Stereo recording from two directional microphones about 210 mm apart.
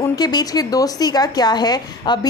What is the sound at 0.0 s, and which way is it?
A woman's voice, 20° left (ahead or behind).